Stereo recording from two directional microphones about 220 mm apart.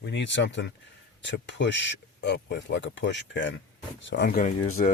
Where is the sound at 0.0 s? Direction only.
50° left (ahead or behind).